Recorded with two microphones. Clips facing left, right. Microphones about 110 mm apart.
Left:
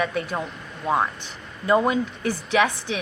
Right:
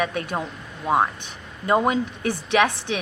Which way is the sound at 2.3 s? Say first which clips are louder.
Right 1 dB; 65° right (ahead or behind).